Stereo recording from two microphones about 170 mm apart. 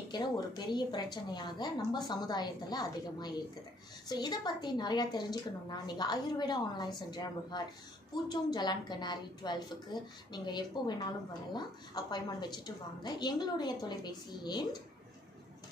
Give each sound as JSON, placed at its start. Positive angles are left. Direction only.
{"t": 0.1, "sound": "a woman's voice", "side_deg": 25}